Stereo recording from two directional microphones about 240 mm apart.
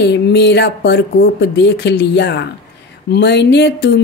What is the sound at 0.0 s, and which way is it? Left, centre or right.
Speech, left.